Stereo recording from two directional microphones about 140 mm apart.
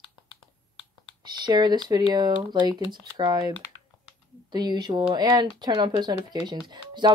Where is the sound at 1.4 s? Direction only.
30° right (ahead or behind).